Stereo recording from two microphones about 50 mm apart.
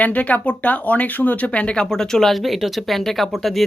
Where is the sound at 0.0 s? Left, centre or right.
Left.